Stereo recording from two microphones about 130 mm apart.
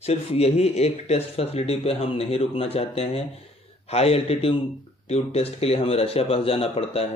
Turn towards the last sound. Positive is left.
turn(degrees=50)  # may be behind; listen again after turning